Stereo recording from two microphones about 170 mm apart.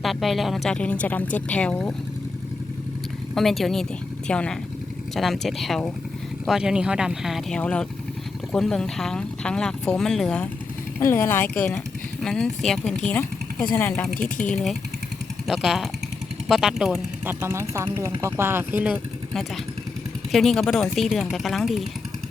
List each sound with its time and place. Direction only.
0.0 s speech: centre (ahead or behind)
3.3 s speech: centre (ahead or behind)
17.4 s speech: 15° right (ahead or behind)
20.3 s speech: centre (ahead or behind)